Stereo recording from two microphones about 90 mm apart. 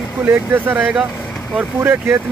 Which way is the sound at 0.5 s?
25° right (ahead or behind).